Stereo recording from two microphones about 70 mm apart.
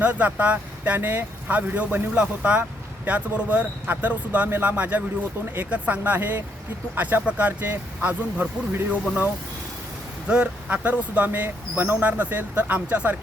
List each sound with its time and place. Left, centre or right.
0.0 s speech: right